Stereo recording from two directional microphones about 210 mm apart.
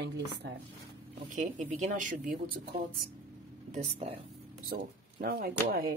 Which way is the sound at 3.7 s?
30° right (ahead or behind).